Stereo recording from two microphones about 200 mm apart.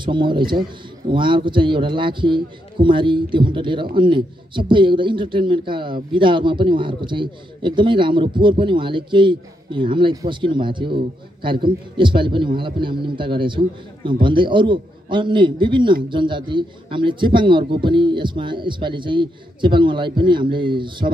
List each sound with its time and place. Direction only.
0.0 s a man's voice: 25° right (ahead or behind)